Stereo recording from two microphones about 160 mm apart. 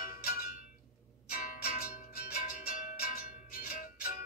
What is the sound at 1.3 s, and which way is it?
Music, 65° left (ahead or behind).